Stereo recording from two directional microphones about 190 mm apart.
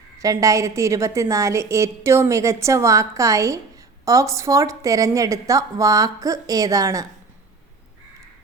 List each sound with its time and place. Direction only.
0.2 s a woman's voice: 15° right (ahead or behind)